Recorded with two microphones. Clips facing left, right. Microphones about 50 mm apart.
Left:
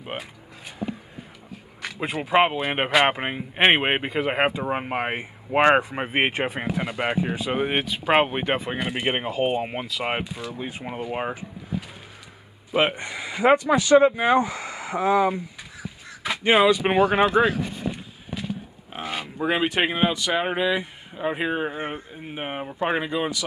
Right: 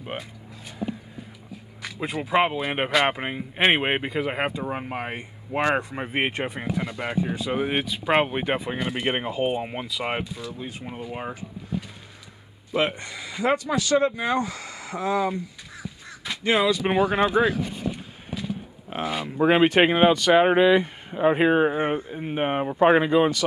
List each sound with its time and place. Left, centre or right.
2.0 s speech: left
6.3 s speech: centre
7.0 s speech: left
7.4 s speech: centre
9.3 s speech: left
10.0 s speech: centre
10.6 s speech: left
12.7 s speech: left
16.9 s speech: centre
17.3 s speech: centre
19.4 s speech: right
19.8 s speech: centre
20.1 s speech: right
20.3 s speech: centre